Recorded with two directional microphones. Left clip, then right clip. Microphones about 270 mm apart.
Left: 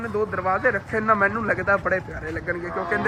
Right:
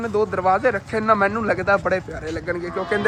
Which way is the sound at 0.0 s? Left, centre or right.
Centre.